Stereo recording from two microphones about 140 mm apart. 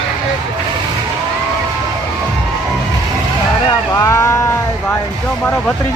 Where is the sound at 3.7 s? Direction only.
20° left (ahead or behind).